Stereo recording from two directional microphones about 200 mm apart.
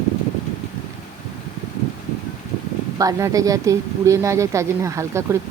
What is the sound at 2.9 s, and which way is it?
Speech, 15° right (ahead or behind).